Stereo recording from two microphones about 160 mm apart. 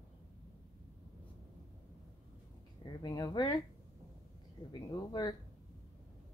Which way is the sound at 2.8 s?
25° left (ahead or behind).